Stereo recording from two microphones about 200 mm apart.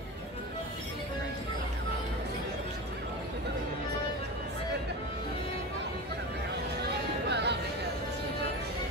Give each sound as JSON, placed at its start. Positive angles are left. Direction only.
{"t": 7.2, "sound": "music", "side_deg": -60}